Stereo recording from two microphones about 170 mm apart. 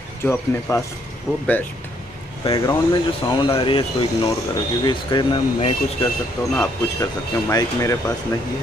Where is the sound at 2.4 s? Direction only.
35° left (ahead or behind).